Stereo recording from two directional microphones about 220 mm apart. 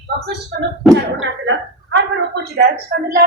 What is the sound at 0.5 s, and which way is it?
Speech, 45° right (ahead or behind).